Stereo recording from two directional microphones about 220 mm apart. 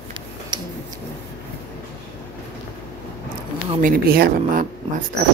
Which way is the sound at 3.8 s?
40° right (ahead or behind).